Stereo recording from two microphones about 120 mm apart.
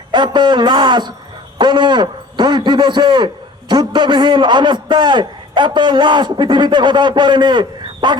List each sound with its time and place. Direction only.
0.1 s a man's voice: 40° right (ahead or behind)